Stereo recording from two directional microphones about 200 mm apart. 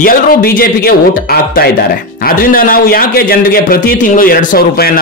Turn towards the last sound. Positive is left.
turn(degrees=50)  # may be behind; listen again after turning